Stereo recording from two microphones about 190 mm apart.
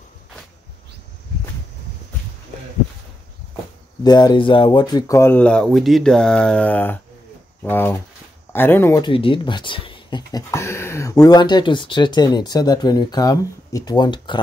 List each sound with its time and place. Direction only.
4.0 s speech: 20° left (ahead or behind)
9.0 s speech: 25° left (ahead or behind)